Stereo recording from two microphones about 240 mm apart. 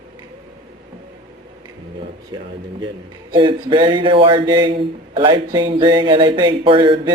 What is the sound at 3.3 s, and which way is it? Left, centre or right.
A man's voice, centre.